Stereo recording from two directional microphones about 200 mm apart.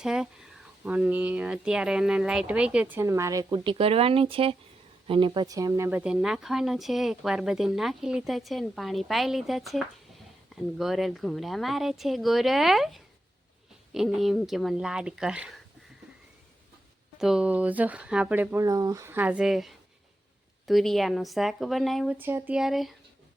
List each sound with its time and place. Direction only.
0.0 s speech: 5° right (ahead or behind)
17.2 s speech: 5° right (ahead or behind)